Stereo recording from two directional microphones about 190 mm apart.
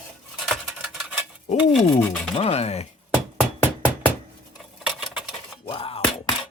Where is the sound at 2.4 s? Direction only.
35° left (ahead or behind).